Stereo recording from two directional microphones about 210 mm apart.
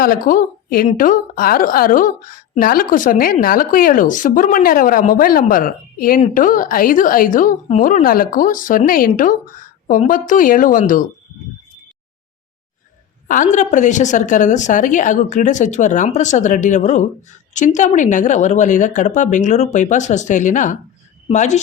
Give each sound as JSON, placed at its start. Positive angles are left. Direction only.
{"t": 0.0, "sound": "a woman's voice", "side_deg": 40}
{"t": 13.2, "sound": "a woman's voice", "side_deg": 40}